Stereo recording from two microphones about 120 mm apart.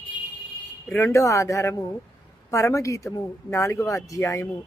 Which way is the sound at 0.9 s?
20° left (ahead or behind).